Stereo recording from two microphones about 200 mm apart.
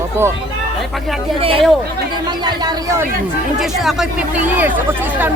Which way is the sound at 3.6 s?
Centre (ahead or behind).